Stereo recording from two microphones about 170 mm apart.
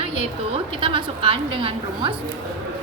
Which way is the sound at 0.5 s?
30° right (ahead or behind).